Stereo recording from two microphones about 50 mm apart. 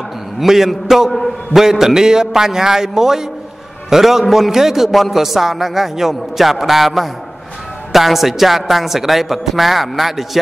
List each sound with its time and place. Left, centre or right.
0.4 s a man's voice: centre